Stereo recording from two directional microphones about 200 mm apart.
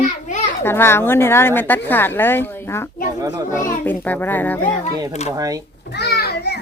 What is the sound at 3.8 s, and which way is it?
Speech, 10° left (ahead or behind).